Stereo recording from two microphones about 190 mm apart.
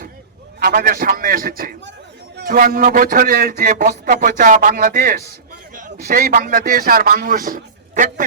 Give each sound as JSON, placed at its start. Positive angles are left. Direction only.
{"t": 0.6, "sound": "a man's voice", "side_deg": -55}